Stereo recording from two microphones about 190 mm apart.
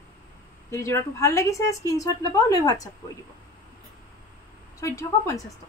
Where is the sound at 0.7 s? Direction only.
15° left (ahead or behind).